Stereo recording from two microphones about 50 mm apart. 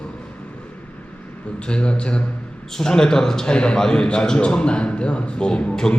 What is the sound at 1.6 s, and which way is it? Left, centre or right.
A man's voice, left.